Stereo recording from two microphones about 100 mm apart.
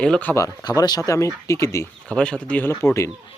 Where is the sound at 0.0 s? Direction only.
10° left (ahead or behind).